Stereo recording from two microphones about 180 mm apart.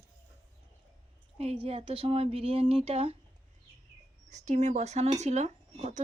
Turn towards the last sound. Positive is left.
turn(degrees=-40)  # may be behind; listen again after turning